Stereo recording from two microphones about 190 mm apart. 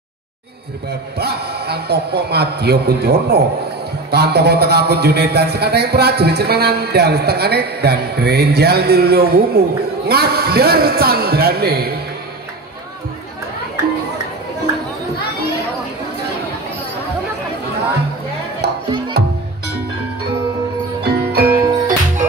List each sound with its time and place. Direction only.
1.1 s a man's voice: 60° right (ahead or behind)
19.2 s music: 60° right (ahead or behind)
21.0 s music: 55° right (ahead or behind)